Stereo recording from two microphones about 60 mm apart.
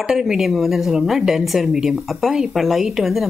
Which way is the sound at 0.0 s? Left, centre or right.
Centre.